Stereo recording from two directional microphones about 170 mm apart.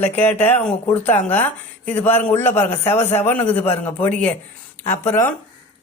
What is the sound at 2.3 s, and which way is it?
Speech, 45° left (ahead or behind).